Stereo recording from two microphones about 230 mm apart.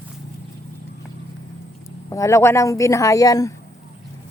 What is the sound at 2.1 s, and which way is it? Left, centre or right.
Speech, centre.